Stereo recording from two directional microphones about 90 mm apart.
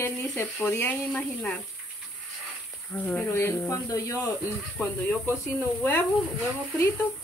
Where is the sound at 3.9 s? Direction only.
35° left (ahead or behind).